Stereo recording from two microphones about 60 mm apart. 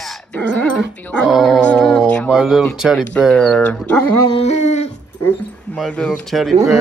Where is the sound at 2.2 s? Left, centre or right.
Centre.